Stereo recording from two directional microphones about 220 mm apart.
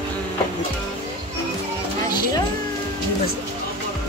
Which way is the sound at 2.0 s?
20° left (ahead or behind).